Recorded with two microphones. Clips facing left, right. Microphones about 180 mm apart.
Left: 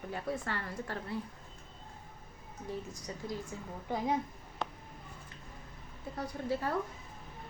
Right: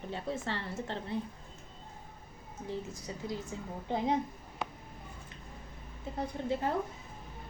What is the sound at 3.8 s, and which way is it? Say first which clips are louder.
Speech: right 2 dB; 20° right (ahead or behind).